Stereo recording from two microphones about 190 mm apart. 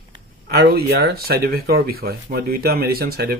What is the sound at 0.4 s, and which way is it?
Speech, 55° right (ahead or behind).